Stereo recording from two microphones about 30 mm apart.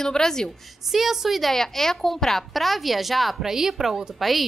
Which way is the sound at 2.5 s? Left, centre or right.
Centre.